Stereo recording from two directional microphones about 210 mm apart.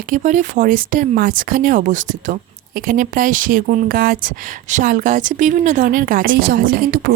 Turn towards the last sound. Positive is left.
turn(degrees=-45)  # may be behind; listen again after turning